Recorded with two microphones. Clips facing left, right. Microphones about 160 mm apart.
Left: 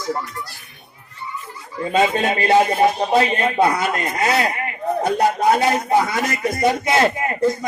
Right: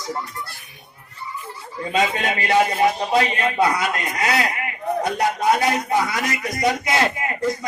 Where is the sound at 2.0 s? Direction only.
30° left (ahead or behind).